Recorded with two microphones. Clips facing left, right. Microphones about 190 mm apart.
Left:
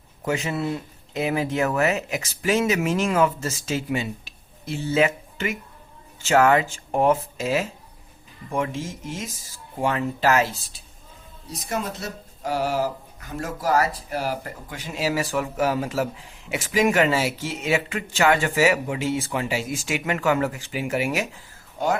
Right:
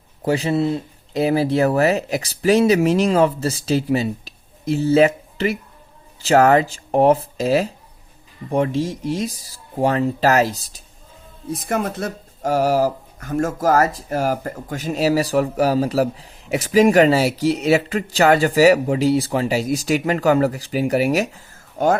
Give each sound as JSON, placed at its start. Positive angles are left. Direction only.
{"t": 0.3, "sound": "speech", "side_deg": -35}
{"t": 11.4, "sound": "speech", "side_deg": -55}